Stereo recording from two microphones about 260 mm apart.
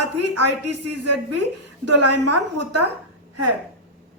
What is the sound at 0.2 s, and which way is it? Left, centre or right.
A woman's voice, right.